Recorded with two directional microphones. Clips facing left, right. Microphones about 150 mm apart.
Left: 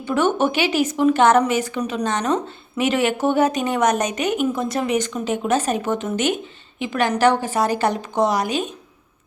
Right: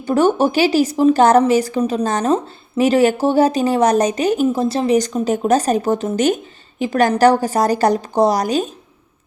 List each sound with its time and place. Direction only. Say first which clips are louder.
0.0 s speech: right 4 dB; 35° right (ahead or behind)